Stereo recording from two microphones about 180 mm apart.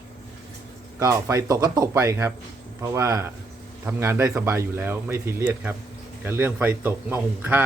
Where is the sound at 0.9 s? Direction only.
15° right (ahead or behind).